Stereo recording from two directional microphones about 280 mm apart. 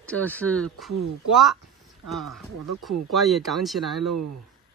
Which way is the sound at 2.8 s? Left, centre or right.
Centre.